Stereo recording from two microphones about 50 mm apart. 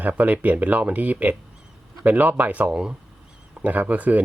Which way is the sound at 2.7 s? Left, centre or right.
Centre.